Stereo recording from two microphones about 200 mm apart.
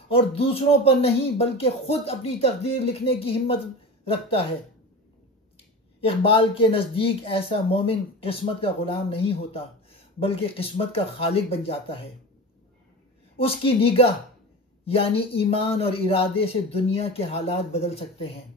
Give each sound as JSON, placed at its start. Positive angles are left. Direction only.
{"t": 0.1, "sound": "speech", "side_deg": 30}
{"t": 5.9, "sound": "speech", "side_deg": 25}
{"t": 13.4, "sound": "speech", "side_deg": 30}